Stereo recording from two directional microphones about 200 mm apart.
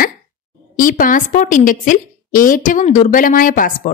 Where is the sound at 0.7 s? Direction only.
45° left (ahead or behind).